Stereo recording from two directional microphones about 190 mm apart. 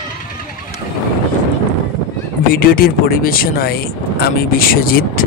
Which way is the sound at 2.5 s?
50° left (ahead or behind).